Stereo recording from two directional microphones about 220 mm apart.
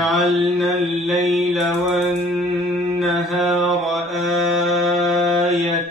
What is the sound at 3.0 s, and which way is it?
Mantra, centre (ahead or behind).